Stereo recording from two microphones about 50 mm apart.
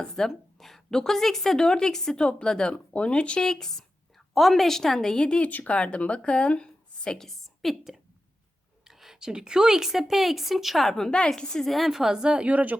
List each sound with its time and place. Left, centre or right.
0.0 s a woman's voice: centre
2.9 s a woman's voice: left
5.4 s speech: left
7.1 s a woman's voice: centre
11.7 s a woman's voice: centre
12.5 s speech: right